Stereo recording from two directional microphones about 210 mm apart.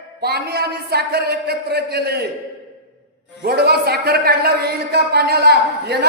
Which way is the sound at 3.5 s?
50° right (ahead or behind).